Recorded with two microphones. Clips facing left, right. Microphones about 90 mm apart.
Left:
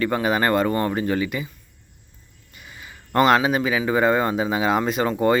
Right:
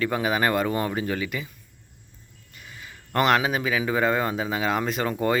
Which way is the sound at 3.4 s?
Centre (ahead or behind).